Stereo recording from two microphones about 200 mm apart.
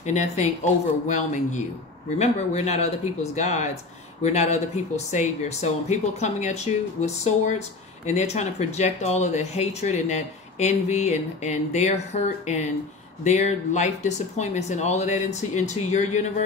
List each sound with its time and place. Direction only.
0.0 s speech: 35° left (ahead or behind)